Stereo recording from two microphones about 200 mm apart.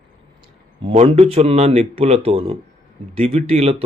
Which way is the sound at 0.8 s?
30° right (ahead or behind).